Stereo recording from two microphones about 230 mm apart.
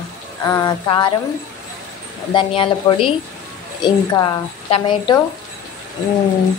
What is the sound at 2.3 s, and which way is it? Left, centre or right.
A woman's voice, left.